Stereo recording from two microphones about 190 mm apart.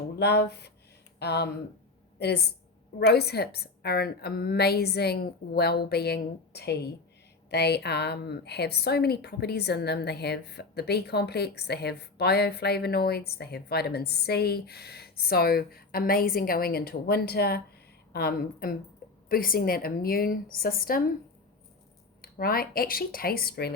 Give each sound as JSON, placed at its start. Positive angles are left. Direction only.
{"t": 0.2, "sound": "a woman's voice", "side_deg": 60}
{"t": 22.2, "sound": "a woman's voice", "side_deg": 50}